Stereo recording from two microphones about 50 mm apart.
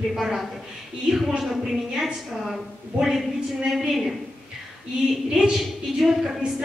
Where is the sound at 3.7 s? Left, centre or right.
Centre.